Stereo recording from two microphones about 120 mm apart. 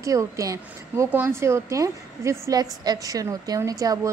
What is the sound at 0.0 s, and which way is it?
A woman's voice, 25° right (ahead or behind).